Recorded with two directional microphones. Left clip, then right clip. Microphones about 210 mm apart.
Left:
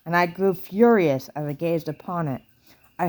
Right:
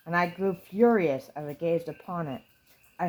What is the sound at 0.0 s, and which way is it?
Speech, 45° left (ahead or behind).